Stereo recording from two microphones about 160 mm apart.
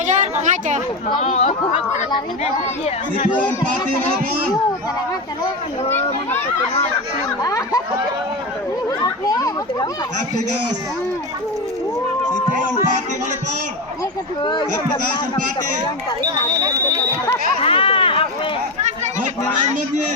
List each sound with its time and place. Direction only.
0.0 s a sound: 50° right (ahead or behind)
1.2 s speech: 40° left (ahead or behind)
7.4 s speech: 20° left (ahead or behind)
9.0 s children playing: 20° left (ahead or behind)
14.4 s speech: 30° left (ahead or behind)
16.2 s speech: 25° right (ahead or behind)
17.6 s speech: 35° left (ahead or behind)
18.8 s speech: 50° right (ahead or behind)